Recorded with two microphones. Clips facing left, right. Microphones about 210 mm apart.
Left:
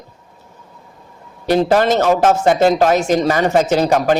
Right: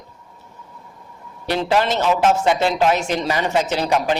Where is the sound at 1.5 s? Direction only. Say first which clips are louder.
Left 6 dB; 45° left (ahead or behind).